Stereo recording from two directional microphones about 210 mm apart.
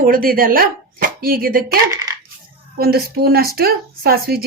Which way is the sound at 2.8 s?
45° right (ahead or behind).